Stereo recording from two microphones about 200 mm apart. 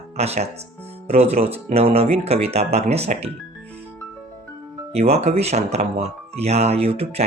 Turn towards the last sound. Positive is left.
turn(degrees=-30)  # may be behind; listen again after turning